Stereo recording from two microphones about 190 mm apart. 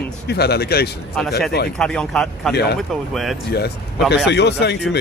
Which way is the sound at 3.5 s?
55° left (ahead or behind).